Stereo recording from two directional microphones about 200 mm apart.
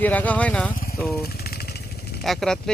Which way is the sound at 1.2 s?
50° left (ahead or behind).